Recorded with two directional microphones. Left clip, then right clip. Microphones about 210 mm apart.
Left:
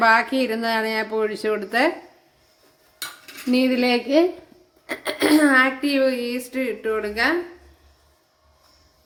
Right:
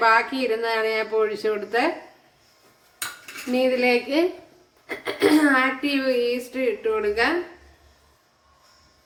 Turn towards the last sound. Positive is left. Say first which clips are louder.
# even
turn(degrees=45)  # may be behind; listen again after turning